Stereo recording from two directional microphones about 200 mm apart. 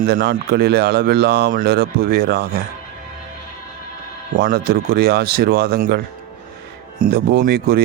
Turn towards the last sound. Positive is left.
turn(degrees=-50)  # may be behind; listen again after turning